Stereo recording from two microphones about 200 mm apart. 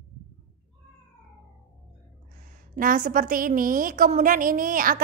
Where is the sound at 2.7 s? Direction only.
45° right (ahead or behind).